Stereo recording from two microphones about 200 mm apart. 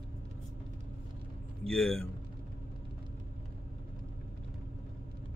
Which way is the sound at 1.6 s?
Centre (ahead or behind).